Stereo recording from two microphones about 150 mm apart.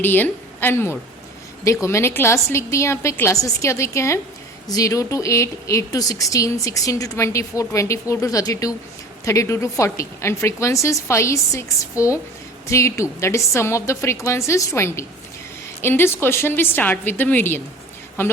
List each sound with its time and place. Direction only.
0.0 s a woman's voice: 10° left (ahead or behind)